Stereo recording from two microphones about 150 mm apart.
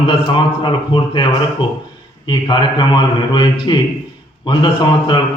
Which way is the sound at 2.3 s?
30° left (ahead or behind).